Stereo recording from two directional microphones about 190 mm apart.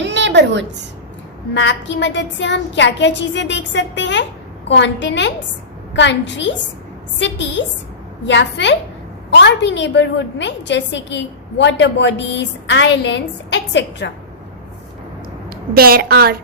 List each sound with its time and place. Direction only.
0.0 s a sound: 70° right (ahead or behind)
1.5 s a woman's voice: 70° left (ahead or behind)
15.4 s a woman's voice: 55° right (ahead or behind)